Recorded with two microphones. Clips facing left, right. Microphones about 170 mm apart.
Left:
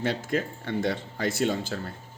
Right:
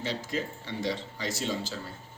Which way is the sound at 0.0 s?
55° left (ahead or behind).